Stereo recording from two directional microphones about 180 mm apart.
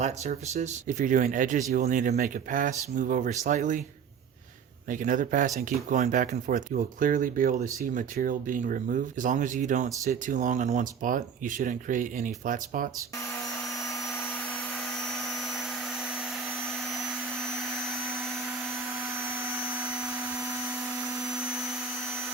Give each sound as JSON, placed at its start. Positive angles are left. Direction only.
{"t": 0.0, "sound": "speech", "side_deg": -40}
{"t": 4.9, "sound": "speech", "side_deg": -45}